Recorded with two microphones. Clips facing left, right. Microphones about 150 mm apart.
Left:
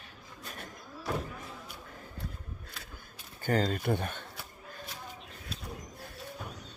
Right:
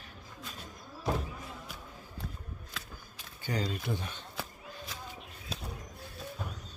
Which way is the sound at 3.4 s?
50° left (ahead or behind).